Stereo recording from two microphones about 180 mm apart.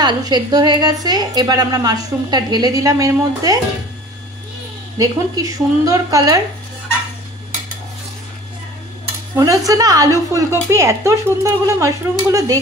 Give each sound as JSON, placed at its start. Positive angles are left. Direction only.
{"t": 0.0, "sound": "a woman's voice", "side_deg": -20}
{"t": 4.9, "sound": "a woman's voice", "side_deg": -20}
{"t": 9.3, "sound": "dishes", "side_deg": -20}
{"t": 9.7, "sound": "a woman's voice", "side_deg": -20}